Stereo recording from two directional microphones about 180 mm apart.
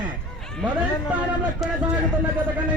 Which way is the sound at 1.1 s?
5° right (ahead or behind).